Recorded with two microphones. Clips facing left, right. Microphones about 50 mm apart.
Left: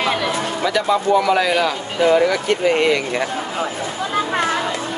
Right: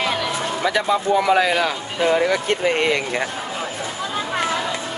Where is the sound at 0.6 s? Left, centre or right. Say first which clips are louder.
Left 1 dB; right.